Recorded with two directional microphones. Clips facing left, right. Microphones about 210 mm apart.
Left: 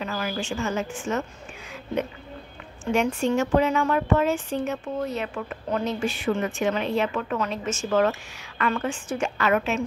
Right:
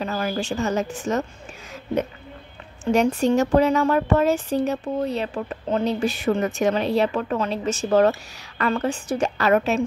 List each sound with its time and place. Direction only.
0.0 s a woman's voice: 35° right (ahead or behind)
2.8 s a woman's voice: 40° right (ahead or behind)